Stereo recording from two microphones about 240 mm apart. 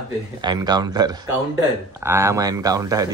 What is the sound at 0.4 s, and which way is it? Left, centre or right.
Speech, centre.